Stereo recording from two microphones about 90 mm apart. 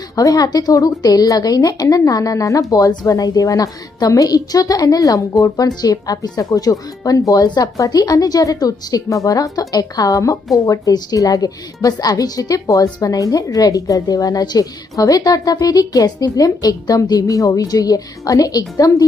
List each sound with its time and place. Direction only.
0.2 s a woman's voice: 40° left (ahead or behind)